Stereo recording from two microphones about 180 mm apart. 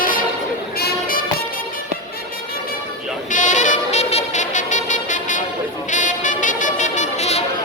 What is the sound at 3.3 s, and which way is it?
Music, 45° left (ahead or behind).